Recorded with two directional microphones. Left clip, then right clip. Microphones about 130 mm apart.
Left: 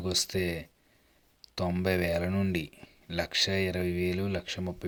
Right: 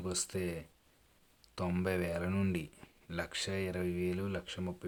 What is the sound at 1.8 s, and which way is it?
Speech, 20° left (ahead or behind).